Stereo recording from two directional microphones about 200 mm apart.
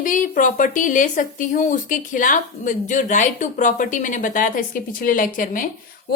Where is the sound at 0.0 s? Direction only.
40° left (ahead or behind).